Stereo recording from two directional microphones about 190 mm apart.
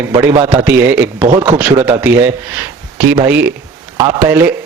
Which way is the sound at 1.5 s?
10° right (ahead or behind).